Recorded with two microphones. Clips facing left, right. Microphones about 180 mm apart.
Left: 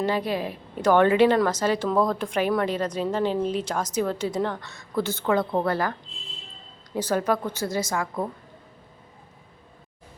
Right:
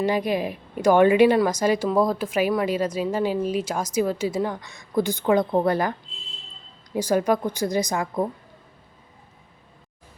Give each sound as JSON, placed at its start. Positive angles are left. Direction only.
{"t": 0.0, "sound": "a woman's voice", "side_deg": -15}
{"t": 6.9, "sound": "a woman's voice", "side_deg": -15}